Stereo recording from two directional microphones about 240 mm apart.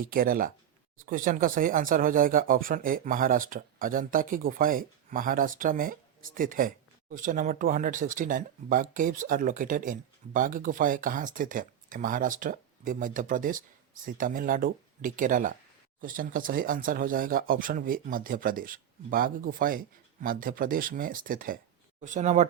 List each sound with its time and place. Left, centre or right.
0.0 s speech: right